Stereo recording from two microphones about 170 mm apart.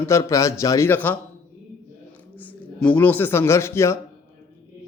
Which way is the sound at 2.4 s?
10° left (ahead or behind).